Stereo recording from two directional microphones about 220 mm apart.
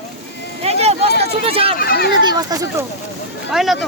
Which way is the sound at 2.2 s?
15° right (ahead or behind).